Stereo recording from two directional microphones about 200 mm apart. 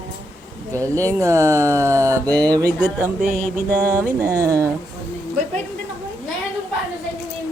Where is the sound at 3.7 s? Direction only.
10° left (ahead or behind).